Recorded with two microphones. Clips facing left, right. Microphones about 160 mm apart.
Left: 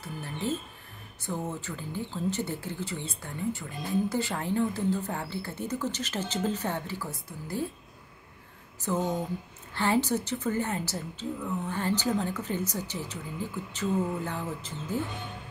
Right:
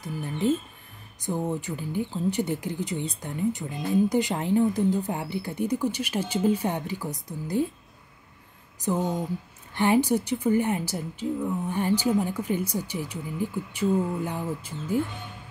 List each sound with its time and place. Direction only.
0.0 s a woman's voice: 15° right (ahead or behind)
8.8 s a woman's voice: 15° right (ahead or behind)